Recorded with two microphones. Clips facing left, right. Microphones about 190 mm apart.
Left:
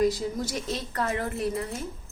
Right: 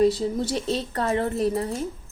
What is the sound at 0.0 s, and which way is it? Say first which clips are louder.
A woman's voice: right 4 dB; 30° right (ahead or behind).